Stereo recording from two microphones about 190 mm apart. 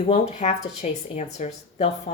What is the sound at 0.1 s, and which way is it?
Speech, 35° left (ahead or behind).